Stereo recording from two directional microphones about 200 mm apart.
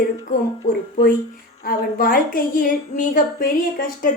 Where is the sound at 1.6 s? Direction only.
45° left (ahead or behind).